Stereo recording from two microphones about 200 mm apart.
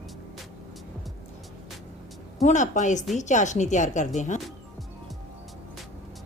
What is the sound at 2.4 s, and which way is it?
Speech, 35° left (ahead or behind).